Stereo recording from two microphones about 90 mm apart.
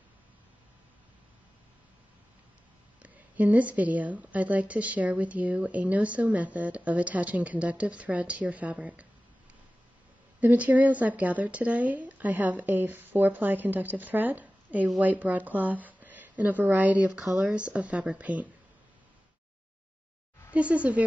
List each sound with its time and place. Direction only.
3.0 s a woman's voice: 15° right (ahead or behind)
10.4 s a woman's voice: 20° right (ahead or behind)
20.5 s a woman's voice: 15° right (ahead or behind)